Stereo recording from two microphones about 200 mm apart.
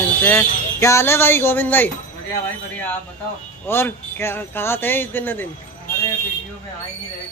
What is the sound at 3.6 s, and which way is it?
Speech, 10° left (ahead or behind).